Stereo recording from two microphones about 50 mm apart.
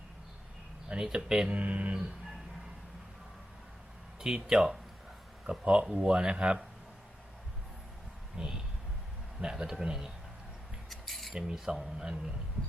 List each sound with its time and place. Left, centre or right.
0.9 s speech: centre
1.5 s speech: right
4.4 s speech: centre
8.4 s speech: centre
10.8 s a sound: centre
11.3 s speech: centre